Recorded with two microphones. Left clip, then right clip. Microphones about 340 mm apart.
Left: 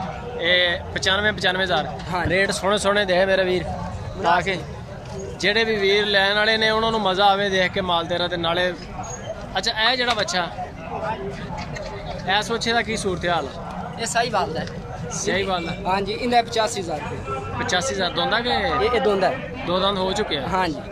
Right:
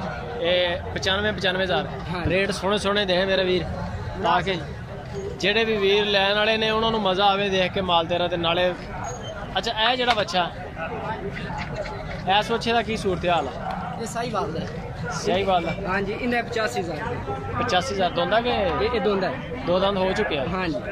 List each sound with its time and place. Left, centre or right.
0.4 s speech: centre
12.3 s speech: centre
14.1 s speech: left
15.1 s speech: centre
15.9 s speech: centre
17.6 s speech: centre
19.7 s speech: centre